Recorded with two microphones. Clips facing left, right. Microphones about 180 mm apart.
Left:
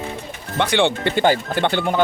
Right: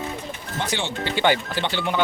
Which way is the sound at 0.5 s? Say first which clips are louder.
Left 10 dB; 60° left (ahead or behind).